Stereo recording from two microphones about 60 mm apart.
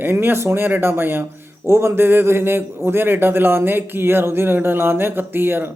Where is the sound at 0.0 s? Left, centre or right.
Right.